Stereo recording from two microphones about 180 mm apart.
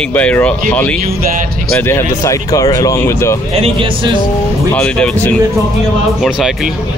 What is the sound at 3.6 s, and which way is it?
Speech, 30° right (ahead or behind).